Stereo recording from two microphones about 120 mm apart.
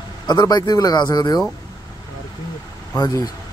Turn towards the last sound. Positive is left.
turn(degrees=30)  # may be behind; listen again after turning